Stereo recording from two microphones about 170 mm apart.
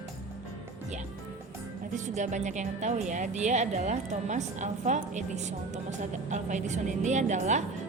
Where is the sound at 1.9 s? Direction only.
45° right (ahead or behind).